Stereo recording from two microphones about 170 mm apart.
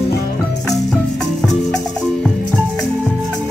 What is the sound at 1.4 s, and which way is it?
Music, centre (ahead or behind).